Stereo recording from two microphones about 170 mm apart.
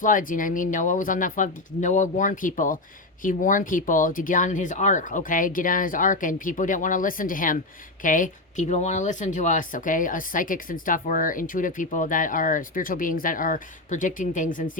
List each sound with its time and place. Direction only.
0.0 s speech: 50° left (ahead or behind)